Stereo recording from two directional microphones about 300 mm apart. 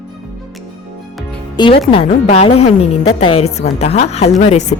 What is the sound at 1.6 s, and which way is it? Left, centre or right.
Speech, centre.